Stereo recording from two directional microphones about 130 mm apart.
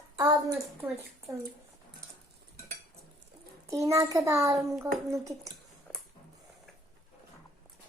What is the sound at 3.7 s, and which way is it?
A child's voice, 25° right (ahead or behind).